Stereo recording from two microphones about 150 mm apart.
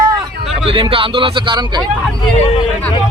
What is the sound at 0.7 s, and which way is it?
Speech, 35° right (ahead or behind).